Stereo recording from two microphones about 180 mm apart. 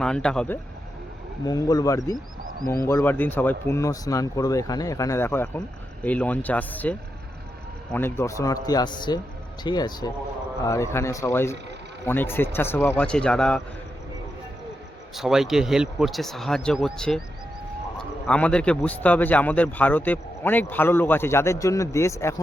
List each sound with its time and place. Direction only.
0.0 s speech: 5° left (ahead or behind)
1.5 s speech: 20° left (ahead or behind)
7.9 s speech: 15° left (ahead or behind)
15.1 s speech: centre (ahead or behind); by 22.4 s 15° left (ahead or behind)